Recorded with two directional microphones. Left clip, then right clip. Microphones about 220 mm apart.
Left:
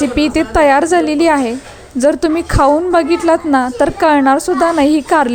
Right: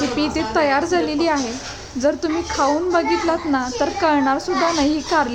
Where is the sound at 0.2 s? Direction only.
30° left (ahead or behind).